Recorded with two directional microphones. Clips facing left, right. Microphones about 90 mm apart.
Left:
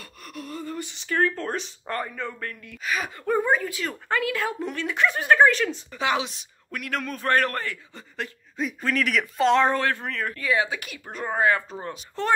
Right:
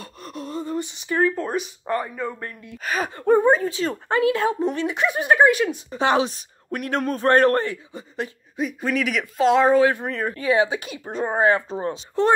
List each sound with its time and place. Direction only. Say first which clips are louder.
0.0 s a sound: right 5 dB; 25° right (ahead or behind); by 2.3 s 10° right (ahead or behind)
2.4 s speech: right 1 dB; 25° right (ahead or behind)
2.8 s speech: right 4 dB; 40° right (ahead or behind); by 5.9 s 15° right (ahead or behind)
5.9 s a man's voice: right 6 dB; 40° right (ahead or behind); by 8.3 s 20° right (ahead or behind)
8.5 s speech: right 2 dB; 5° right (ahead or behind); by 12.4 s 25° right (ahead or behind)